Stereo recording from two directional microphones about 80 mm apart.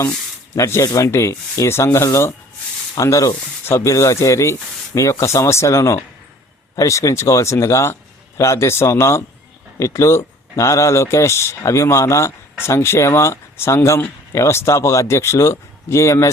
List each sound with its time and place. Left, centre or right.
0.5 s speech: left